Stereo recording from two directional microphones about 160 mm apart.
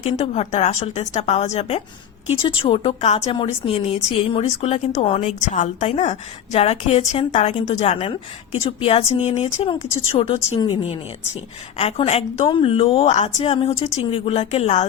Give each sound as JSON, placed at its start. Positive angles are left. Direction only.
{"t": 0.0, "sound": "a woman's voice", "side_deg": 45}
{"t": 9.7, "sound": "speech", "side_deg": 20}
{"t": 10.2, "sound": "speech", "side_deg": 40}